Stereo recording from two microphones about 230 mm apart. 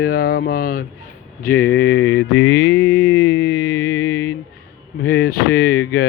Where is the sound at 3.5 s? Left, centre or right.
Left.